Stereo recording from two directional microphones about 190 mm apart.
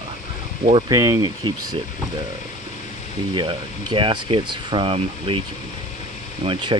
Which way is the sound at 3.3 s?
25° right (ahead or behind).